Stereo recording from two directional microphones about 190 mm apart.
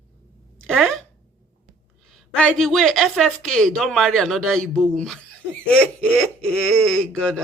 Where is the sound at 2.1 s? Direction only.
5° left (ahead or behind).